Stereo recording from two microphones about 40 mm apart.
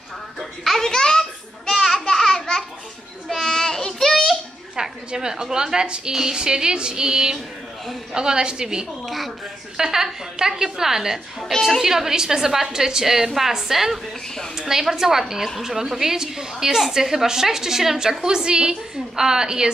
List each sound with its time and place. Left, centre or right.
0.4 s children playing: centre
1.7 s a sound: centre
3.3 s child singing: centre
4.7 s a woman's voice: centre
9.0 s a sound: centre
9.8 s a woman's voice: centre